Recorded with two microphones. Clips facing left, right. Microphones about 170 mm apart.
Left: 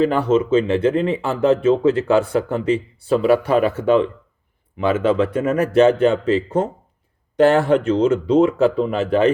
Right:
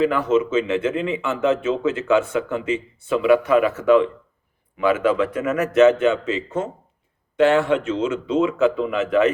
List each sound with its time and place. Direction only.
0.0 s a man's voice: 30° left (ahead or behind)